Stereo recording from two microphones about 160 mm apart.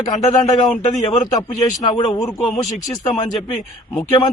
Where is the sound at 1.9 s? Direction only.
30° left (ahead or behind).